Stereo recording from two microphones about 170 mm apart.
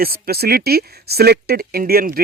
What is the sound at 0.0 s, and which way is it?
Speech, 65° right (ahead or behind).